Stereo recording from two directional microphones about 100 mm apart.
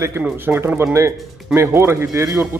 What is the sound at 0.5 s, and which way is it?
Speech, 15° right (ahead or behind).